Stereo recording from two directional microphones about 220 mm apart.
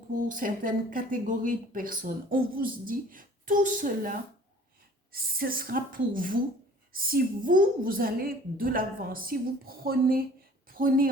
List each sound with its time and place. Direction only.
0.3 s a woman's voice: 35° right (ahead or behind)